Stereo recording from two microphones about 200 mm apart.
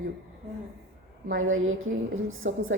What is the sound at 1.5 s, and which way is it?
A woman's voice, 90° right.